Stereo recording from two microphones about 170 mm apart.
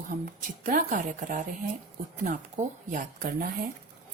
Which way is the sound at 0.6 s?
55° right (ahead or behind).